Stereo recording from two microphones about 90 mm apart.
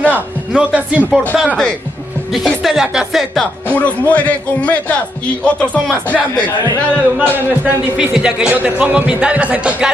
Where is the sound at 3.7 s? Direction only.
15° left (ahead or behind).